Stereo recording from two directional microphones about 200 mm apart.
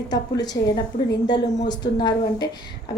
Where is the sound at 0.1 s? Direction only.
20° left (ahead or behind).